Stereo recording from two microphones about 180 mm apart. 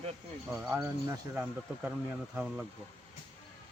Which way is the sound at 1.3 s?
10° right (ahead or behind).